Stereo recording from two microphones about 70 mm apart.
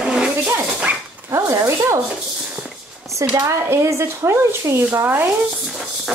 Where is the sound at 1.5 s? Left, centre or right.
Right.